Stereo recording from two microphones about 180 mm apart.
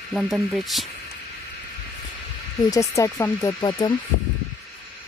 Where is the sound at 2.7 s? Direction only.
15° left (ahead or behind).